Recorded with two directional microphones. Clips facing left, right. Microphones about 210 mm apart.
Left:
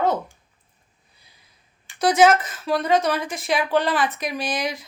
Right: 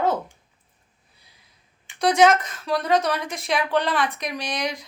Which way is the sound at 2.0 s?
5° left (ahead or behind).